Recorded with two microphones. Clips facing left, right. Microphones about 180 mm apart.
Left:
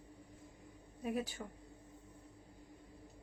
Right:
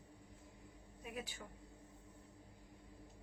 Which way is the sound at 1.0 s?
40° left (ahead or behind).